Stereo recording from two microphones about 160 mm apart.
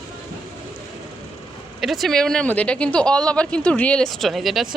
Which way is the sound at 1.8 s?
Centre (ahead or behind).